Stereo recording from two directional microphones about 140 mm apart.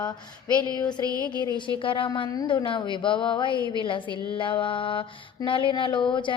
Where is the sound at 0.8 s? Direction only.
30° left (ahead or behind).